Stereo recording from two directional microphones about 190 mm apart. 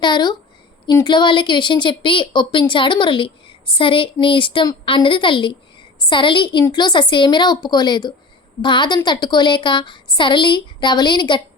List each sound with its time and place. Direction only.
0.0 s a woman's voice: 25° left (ahead or behind)